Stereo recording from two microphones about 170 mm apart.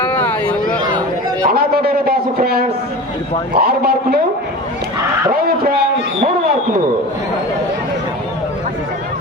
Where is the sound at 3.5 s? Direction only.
60° right (ahead or behind).